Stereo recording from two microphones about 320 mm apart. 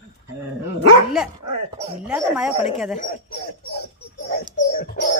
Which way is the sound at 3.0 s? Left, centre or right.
Left.